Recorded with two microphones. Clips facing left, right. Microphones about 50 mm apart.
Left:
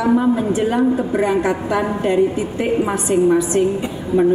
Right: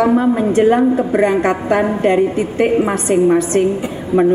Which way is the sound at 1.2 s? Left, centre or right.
Right.